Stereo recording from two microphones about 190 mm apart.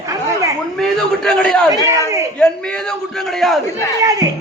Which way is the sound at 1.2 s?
5° left (ahead or behind).